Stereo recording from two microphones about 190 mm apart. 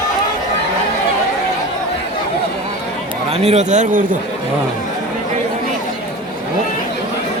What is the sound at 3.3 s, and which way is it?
Speech, 30° right (ahead or behind).